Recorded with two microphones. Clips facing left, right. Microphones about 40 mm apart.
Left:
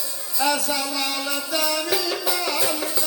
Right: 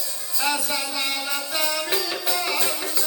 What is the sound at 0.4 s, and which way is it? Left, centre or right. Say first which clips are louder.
Music: left 2 dB; centre.